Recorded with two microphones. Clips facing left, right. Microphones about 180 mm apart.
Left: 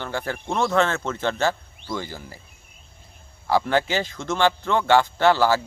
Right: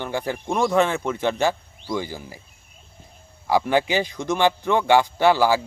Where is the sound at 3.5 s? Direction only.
15° right (ahead or behind).